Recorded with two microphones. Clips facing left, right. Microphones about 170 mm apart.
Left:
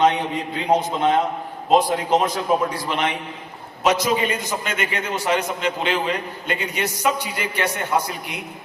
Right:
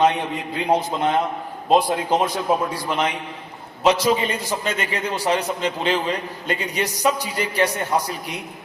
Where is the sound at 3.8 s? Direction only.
35° right (ahead or behind).